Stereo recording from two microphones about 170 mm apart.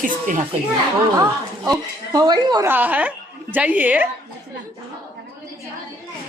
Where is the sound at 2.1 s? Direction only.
25° right (ahead or behind).